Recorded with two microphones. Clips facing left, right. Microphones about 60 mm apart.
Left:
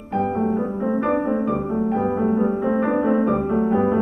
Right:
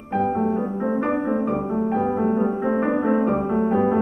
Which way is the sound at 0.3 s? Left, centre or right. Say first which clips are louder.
Even; centre.